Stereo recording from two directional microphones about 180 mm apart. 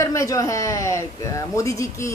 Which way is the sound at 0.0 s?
15° left (ahead or behind).